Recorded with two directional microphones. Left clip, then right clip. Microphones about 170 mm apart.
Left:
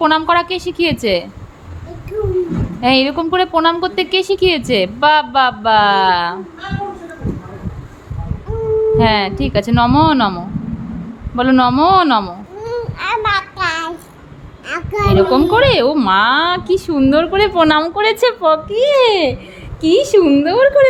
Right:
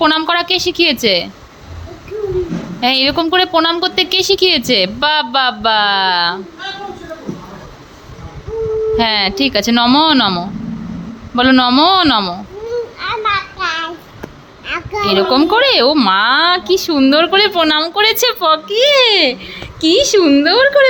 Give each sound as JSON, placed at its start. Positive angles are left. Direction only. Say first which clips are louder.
{"t": 0.0, "sound": "a woman's voice", "louder": "even", "side_deg": 0}
{"t": 2.8, "sound": "a woman's voice", "louder": "right 1 dB", "side_deg": 0}
{"t": 9.0, "sound": "a woman's voice", "louder": "even", "side_deg": -5}
{"t": 13.0, "sound": "a sound", "louder": "left 2 dB", "side_deg": 25}
{"t": 14.7, "sound": "a woman's voice", "louder": "even", "side_deg": 5}
{"t": 17.6, "sound": "a woman's voice", "louder": "even", "side_deg": 20}